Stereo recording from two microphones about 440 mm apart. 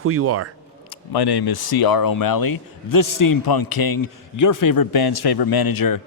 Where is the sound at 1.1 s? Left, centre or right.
Left.